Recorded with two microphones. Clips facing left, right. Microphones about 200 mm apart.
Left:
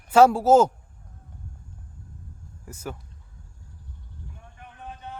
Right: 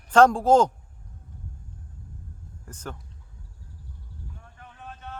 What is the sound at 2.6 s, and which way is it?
Speech, 10° left (ahead or behind).